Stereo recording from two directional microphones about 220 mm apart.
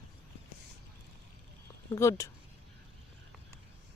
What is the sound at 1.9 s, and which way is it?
Speech, 15° left (ahead or behind).